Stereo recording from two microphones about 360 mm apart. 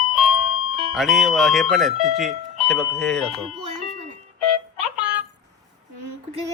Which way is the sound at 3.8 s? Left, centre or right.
Centre.